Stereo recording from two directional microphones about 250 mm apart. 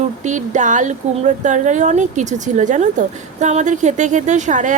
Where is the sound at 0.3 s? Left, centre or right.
Right.